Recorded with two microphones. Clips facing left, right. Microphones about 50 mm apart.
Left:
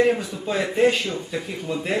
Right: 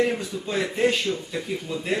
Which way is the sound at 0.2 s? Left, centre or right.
Centre.